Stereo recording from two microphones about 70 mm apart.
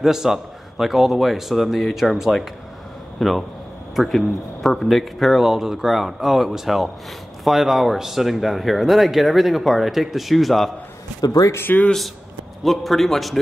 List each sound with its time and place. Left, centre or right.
0.0 s a man's voice: centre
11.1 s speech: left
11.5 s speech: left
12.6 s speech: centre